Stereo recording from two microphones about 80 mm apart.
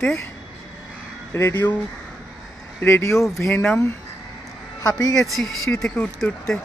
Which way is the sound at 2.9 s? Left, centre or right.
Left.